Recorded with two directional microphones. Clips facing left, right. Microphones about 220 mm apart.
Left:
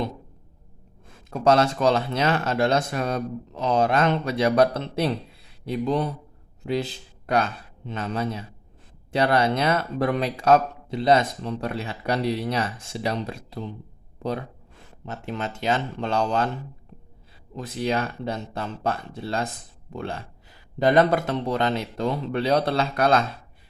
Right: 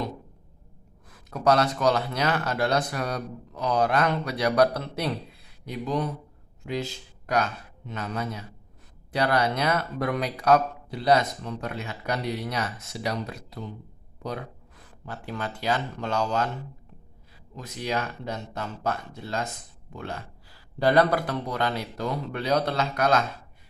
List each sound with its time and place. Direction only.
1.0 s speech: 25° left (ahead or behind)
6.6 s speech: 35° left (ahead or behind)
14.8 s speech: 25° left (ahead or behind)
17.5 s speech: 30° left (ahead or behind)